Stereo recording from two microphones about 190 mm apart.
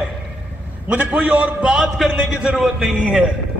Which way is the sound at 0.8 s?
5° right (ahead or behind).